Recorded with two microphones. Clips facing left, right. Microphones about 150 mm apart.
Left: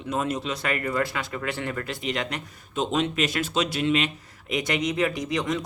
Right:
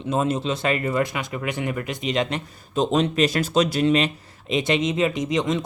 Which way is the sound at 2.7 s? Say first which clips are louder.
Right 4 dB; 35° right (ahead or behind).